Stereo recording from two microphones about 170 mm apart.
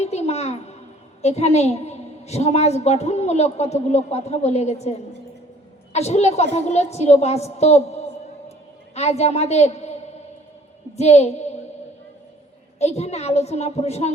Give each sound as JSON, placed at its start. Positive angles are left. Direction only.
{"t": 0.0, "sound": "a sound", "side_deg": 40}
{"t": 1.2, "sound": "a woman's voice", "side_deg": 40}
{"t": 12.8, "sound": "a woman's voice", "side_deg": 40}